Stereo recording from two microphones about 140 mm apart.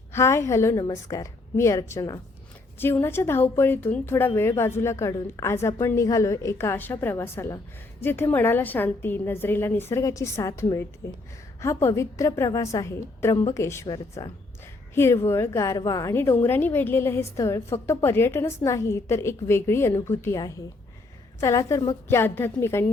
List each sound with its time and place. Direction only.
0.1 s a woman's voice: 20° left (ahead or behind)
13.8 s speech: 30° left (ahead or behind)
14.9 s a woman's voice: 20° left (ahead or behind)